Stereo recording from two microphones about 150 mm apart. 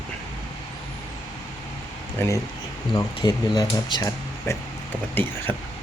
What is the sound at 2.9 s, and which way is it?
Speech, 25° left (ahead or behind).